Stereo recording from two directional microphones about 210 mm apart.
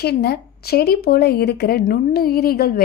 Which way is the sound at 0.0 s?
50° left (ahead or behind).